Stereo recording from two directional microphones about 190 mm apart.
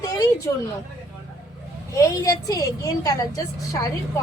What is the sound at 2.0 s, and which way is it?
A woman's voice, 20° left (ahead or behind).